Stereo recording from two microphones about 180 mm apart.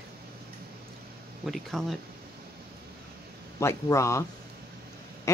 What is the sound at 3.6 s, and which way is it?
Speech, 15° left (ahead or behind).